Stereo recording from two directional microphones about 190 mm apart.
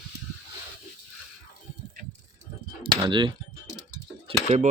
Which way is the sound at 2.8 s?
25° right (ahead or behind).